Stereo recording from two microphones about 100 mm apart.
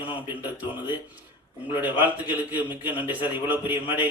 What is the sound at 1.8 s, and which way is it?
A man's voice, 20° right (ahead or behind).